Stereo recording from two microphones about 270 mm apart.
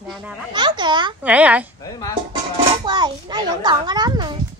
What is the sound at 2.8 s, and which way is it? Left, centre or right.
A child's voice, centre.